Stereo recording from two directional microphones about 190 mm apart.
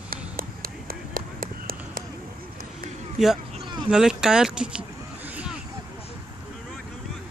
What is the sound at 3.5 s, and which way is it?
Vehicle, 25° right (ahead or behind).